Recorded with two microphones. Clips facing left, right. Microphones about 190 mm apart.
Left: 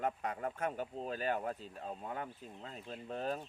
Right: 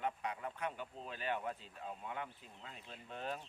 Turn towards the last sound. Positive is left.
turn(degrees=40)  # may be behind; listen again after turning